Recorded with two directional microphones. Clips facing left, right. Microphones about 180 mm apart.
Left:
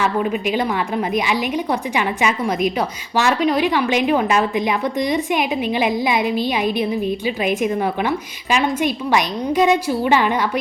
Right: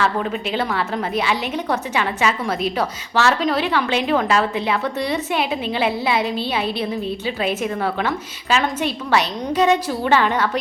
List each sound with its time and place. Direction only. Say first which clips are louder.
0.0 s a woman's voice: left 2 dB; 15° left (ahead or behind)
2.0 s a woman's voice: left 1 dB; 15° left (ahead or behind)